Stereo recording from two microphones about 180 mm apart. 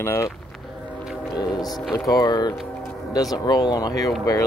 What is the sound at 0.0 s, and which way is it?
Speech, 15° left (ahead or behind).